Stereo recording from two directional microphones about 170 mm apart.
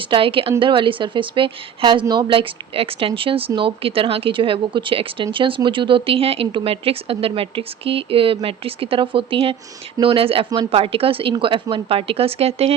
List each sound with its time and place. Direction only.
0.0 s speech: 30° right (ahead or behind)